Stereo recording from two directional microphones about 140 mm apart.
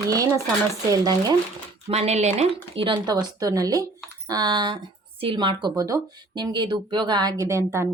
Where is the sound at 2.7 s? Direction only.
35° right (ahead or behind).